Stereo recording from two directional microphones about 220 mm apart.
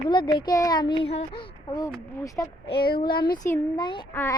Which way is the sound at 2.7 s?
45° left (ahead or behind).